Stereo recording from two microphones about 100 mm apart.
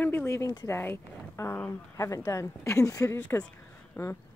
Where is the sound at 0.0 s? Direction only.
25° left (ahead or behind).